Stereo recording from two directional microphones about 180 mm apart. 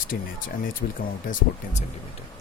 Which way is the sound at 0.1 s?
55° left (ahead or behind).